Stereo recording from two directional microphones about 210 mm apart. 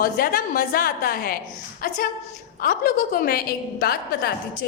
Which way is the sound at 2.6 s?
40° left (ahead or behind).